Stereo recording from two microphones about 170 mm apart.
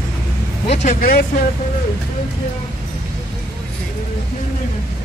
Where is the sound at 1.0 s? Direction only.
60° left (ahead or behind).